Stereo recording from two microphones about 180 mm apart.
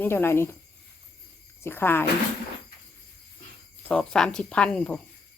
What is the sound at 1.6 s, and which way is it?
Speech, 10° left (ahead or behind).